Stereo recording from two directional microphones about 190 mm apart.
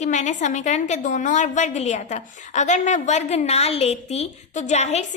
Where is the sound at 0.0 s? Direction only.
40° left (ahead or behind).